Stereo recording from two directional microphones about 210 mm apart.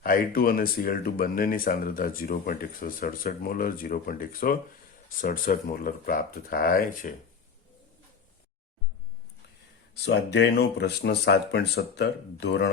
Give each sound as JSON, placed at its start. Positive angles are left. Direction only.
{"t": 0.0, "sound": "speech", "side_deg": 45}
{"t": 10.0, "sound": "speech", "side_deg": 55}